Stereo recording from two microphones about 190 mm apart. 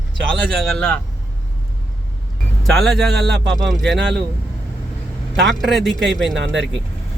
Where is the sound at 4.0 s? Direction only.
65° right (ahead or behind).